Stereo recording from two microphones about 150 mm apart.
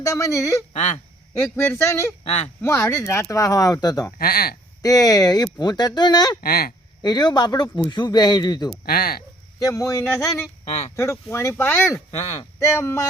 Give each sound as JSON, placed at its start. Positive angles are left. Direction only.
{"t": 0.0, "sound": "speech", "side_deg": 20}
{"t": 0.7, "sound": "speech", "side_deg": 50}
{"t": 1.4, "sound": "speech", "side_deg": 15}
{"t": 2.2, "sound": "speech", "side_deg": 50}
{"t": 2.6, "sound": "speech", "side_deg": 15}
{"t": 4.2, "sound": "speech", "side_deg": 85}
{"t": 4.8, "sound": "speech", "side_deg": 25}
{"t": 6.4, "sound": "speech", "side_deg": 80}
{"t": 7.0, "sound": "speech", "side_deg": 30}
{"t": 8.9, "sound": "speech", "side_deg": 85}
{"t": 9.6, "sound": "speech", "side_deg": 20}